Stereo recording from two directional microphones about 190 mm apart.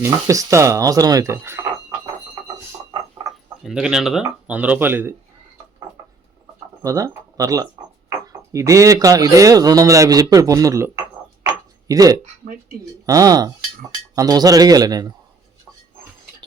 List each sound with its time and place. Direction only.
0.0 s speech: 15° right (ahead or behind)
3.6 s speech: 5° right (ahead or behind)
6.8 s speech: 15° right (ahead or behind)
11.4 s a sound: 20° right (ahead or behind)
13.1 s a man's voice: 20° right (ahead or behind)